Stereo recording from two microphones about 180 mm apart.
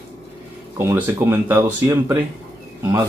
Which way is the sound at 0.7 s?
10° right (ahead or behind).